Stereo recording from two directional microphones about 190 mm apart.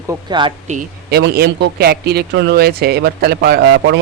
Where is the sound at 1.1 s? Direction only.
55° right (ahead or behind).